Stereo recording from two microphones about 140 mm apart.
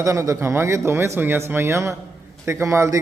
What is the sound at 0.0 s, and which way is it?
A man's voice, 20° right (ahead or behind).